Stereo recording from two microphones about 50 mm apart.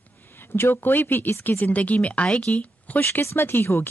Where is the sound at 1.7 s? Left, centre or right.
Left.